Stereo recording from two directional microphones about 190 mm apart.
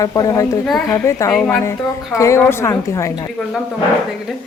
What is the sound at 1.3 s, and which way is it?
Speech, centre (ahead or behind).